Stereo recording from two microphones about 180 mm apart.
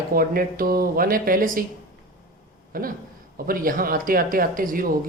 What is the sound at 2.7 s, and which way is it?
Speech, 50° right (ahead or behind).